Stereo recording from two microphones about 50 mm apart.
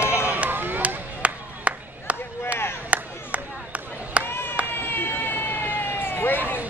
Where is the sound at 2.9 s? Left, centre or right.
Right.